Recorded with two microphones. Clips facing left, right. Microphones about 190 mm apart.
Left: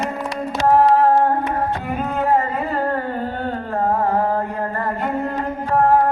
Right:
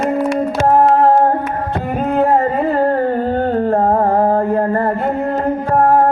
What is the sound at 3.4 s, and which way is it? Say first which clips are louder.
Carnatic music: right 6 dB; 45° right (ahead or behind).